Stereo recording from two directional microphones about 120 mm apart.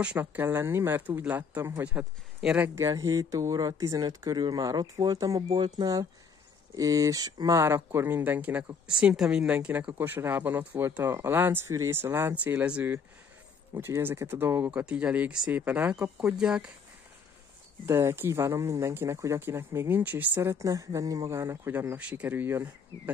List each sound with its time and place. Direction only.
0.2 s speech: 20° right (ahead or behind)
2.7 s speech: 25° right (ahead or behind); by 16.7 s 5° right (ahead or behind)
17.8 s speech: 20° right (ahead or behind)